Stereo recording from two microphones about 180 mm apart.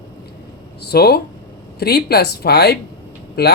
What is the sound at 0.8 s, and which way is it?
Speech, 60° left (ahead or behind).